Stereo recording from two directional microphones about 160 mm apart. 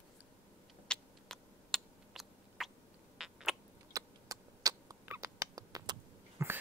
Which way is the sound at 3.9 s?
20° right (ahead or behind).